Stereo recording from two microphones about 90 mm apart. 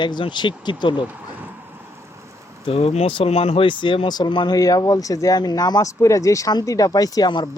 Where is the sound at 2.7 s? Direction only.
90° left; by 4.5 s 60° left (ahead or behind).